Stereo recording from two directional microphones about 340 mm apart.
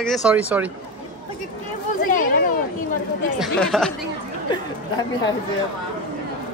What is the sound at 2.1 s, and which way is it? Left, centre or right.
Speech, left.